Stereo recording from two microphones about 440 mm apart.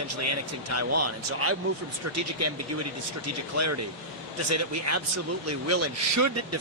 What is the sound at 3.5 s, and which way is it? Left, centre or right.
Speech, right.